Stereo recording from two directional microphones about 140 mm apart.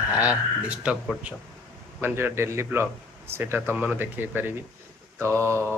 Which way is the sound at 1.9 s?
15° right (ahead or behind).